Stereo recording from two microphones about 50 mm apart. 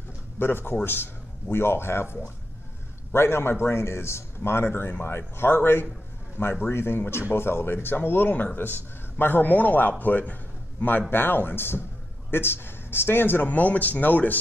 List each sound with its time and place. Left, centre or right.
0.4 s a man's voice: left
13.5 s a man's voice: left